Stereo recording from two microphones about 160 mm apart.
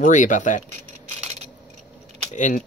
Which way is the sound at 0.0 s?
50° left (ahead or behind).